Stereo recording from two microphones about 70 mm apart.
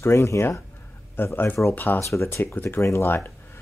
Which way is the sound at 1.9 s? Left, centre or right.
Left.